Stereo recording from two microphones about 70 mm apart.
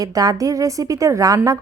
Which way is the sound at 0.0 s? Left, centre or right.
Right.